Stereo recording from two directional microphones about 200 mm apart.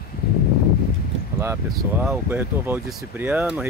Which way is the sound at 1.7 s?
5° right (ahead or behind).